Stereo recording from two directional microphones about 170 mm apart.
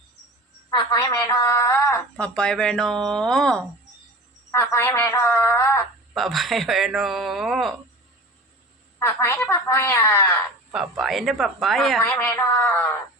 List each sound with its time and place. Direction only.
0.7 s a woman's voice: 25° left (ahead or behind)
6.1 s speech: centre (ahead or behind)
9.0 s a woman's voice: 15° left (ahead or behind)
10.7 s speech: 5° right (ahead or behind)
12.0 s a woman's voice: 10° left (ahead or behind)